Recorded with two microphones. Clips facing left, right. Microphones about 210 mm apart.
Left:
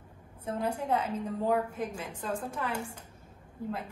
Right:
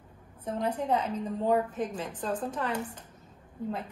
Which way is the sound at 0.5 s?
10° left (ahead or behind).